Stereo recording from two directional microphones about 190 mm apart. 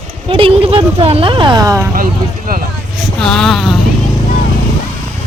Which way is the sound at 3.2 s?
Centre (ahead or behind).